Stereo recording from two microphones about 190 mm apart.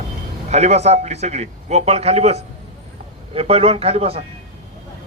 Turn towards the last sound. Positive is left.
turn(degrees=-30)  # may be behind; listen again after turning